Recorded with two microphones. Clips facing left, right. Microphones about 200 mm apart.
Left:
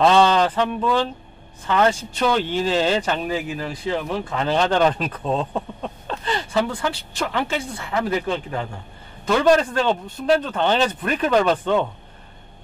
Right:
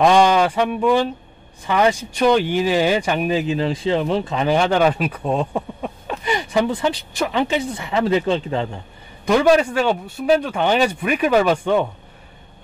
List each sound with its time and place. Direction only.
0.0 s speech: 15° right (ahead or behind)
9.2 s speech: 10° right (ahead or behind)